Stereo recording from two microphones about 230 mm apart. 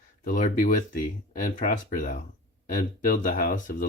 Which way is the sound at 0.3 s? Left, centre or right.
Left.